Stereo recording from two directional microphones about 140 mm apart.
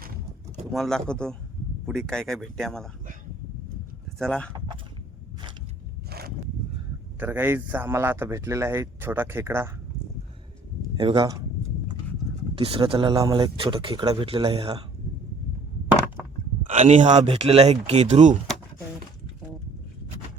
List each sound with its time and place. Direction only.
0.0 s a sound: 90° right
0.7 s speech: 5° left (ahead or behind)
4.2 s speech: 5° left (ahead or behind)
6.1 s a sound: 90° right
7.2 s a man's voice: 15° right (ahead or behind)
10.9 s speech: 35° right (ahead or behind)
12.5 s speech: 40° right (ahead or behind)
14.3 s speech: 40° right (ahead or behind)
16.6 s speech: 55° right (ahead or behind)